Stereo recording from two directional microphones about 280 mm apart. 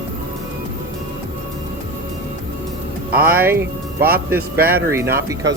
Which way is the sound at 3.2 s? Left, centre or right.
Centre.